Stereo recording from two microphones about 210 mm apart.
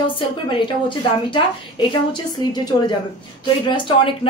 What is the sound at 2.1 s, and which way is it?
Speech, 20° left (ahead or behind).